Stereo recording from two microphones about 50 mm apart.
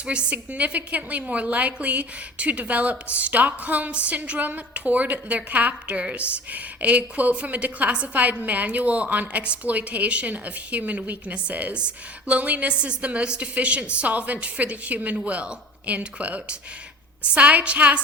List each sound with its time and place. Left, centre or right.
0.0 s a woman's voice: right